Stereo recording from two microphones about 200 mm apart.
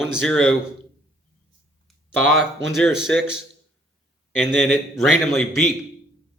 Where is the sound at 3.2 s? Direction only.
65° right (ahead or behind).